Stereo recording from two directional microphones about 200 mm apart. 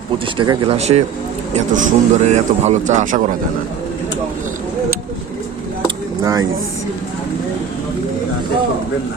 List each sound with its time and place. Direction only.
0.3 s a man's voice: 30° right (ahead or behind)
6.2 s speech: 20° right (ahead or behind)